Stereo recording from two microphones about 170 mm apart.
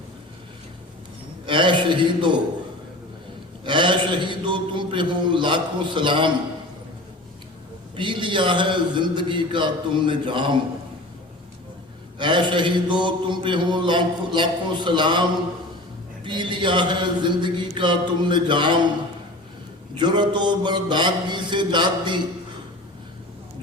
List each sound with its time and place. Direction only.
1.5 s a man's voice: 30° right (ahead or behind)
3.6 s a man's voice: 30° right (ahead or behind)
7.9 s mantra: 30° right (ahead or behind)
12.2 s mantra: 30° right (ahead or behind)
20.0 s mantra: 25° right (ahead or behind)